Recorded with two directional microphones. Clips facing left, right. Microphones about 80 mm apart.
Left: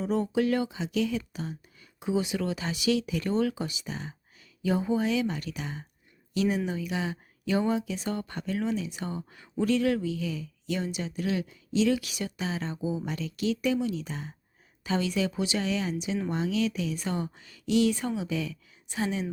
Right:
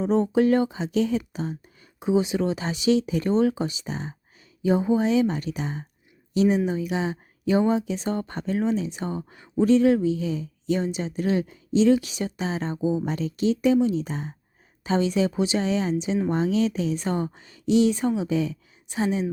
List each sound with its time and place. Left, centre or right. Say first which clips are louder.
0.0 s speech: right 6 dB; right